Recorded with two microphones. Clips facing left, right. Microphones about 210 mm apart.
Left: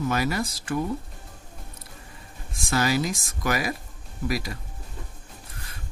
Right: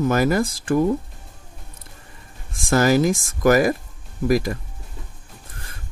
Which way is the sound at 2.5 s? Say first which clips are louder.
Right 7 dB; 50° right (ahead or behind).